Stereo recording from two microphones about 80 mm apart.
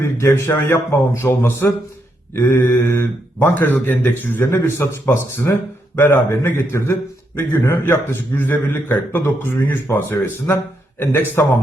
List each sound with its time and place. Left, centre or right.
0.0 s a man's voice: left